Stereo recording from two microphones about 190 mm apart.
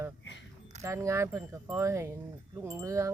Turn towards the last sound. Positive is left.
turn(degrees=-15)  # may be behind; listen again after turning